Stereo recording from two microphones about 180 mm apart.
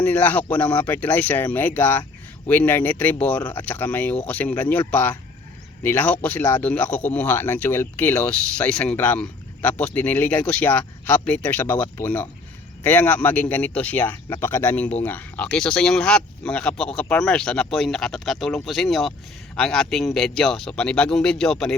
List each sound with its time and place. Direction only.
0.0 s speech: 10° left (ahead or behind)